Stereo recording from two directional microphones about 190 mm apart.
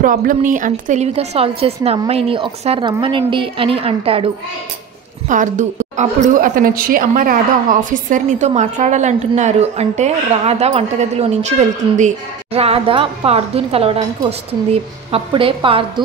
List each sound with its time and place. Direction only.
0.0 s a woman's voice: 45° right (ahead or behind); by 4.3 s 30° right (ahead or behind)
5.3 s a woman's voice: 40° right (ahead or behind)